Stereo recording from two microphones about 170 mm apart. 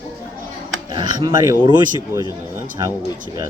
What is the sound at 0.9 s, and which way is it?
Speech, 25° right (ahead or behind).